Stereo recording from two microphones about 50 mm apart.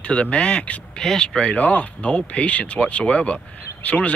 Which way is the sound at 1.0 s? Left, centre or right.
Centre.